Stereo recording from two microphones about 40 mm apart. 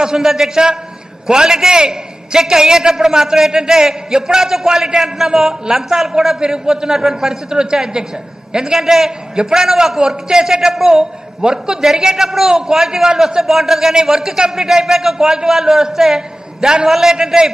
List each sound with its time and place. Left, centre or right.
0.0 s a man's voice: centre
11.8 s a man's voice: centre